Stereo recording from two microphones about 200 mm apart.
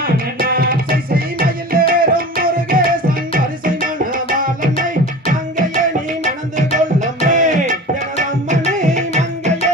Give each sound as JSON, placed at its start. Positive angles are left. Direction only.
{"t": 0.0, "sound": "music", "side_deg": -45}
{"t": 6.2, "sound": "tabla", "side_deg": -40}